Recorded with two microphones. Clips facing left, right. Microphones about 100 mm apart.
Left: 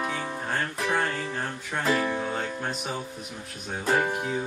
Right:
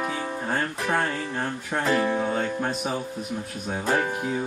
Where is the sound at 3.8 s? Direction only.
5° left (ahead or behind).